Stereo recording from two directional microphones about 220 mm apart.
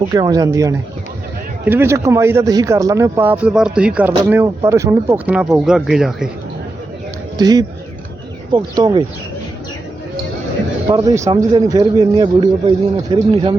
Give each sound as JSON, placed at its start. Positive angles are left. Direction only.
{"t": 0.1, "sound": "speech", "side_deg": -15}
{"t": 7.3, "sound": "speech", "side_deg": -20}
{"t": 10.8, "sound": "speech", "side_deg": -15}